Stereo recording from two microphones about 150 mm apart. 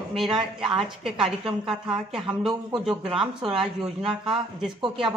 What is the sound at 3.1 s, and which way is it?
Speech, 35° right (ahead or behind).